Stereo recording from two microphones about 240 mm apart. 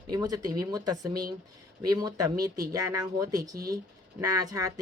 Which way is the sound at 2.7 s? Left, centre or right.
Right.